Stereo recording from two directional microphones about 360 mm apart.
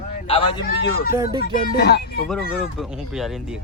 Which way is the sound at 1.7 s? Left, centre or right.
Left.